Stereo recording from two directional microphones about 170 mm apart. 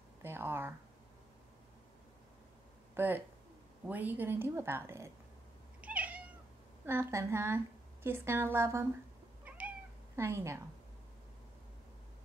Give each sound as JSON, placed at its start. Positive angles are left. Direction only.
{"t": 0.2, "sound": "a sound", "side_deg": -15}
{"t": 2.9, "sound": "a woman's voice", "side_deg": -10}
{"t": 5.8, "sound": "cat", "side_deg": -10}
{"t": 6.9, "sound": "a woman's voice", "side_deg": -15}
{"t": 10.1, "sound": "a woman's voice", "side_deg": -15}